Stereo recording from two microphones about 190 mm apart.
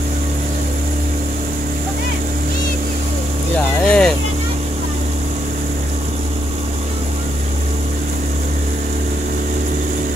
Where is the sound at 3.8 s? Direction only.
5° left (ahead or behind).